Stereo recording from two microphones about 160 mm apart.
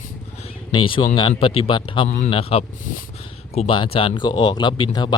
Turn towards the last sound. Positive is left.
turn(degrees=30)  # may be behind; listen again after turning